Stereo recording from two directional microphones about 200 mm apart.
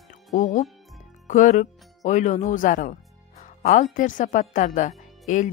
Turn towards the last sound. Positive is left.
turn(degrees=35)  # may be behind; listen again after turning